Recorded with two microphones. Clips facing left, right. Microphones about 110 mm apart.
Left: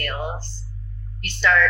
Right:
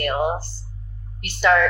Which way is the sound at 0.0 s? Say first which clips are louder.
Right 7 dB; 15° right (ahead or behind).